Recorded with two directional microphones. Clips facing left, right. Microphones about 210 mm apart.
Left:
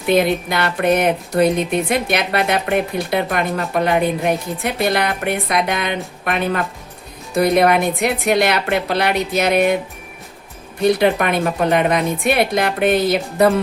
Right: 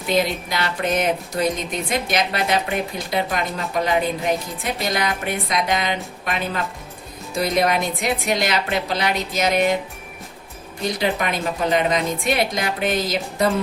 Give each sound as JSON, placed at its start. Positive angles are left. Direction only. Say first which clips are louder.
{"t": 0.1, "sound": "speech", "louder": "left 6 dB", "side_deg": 55}
{"t": 10.8, "sound": "speech", "louder": "left 7 dB", "side_deg": 60}